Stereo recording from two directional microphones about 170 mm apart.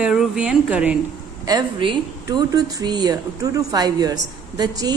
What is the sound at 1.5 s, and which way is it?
Speech, 25° right (ahead or behind).